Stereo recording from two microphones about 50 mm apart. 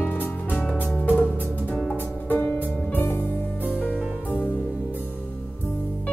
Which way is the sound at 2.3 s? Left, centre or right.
Left.